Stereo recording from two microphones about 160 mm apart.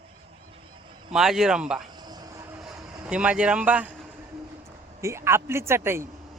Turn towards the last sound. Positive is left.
turn(degrees=-15)  # may be behind; listen again after turning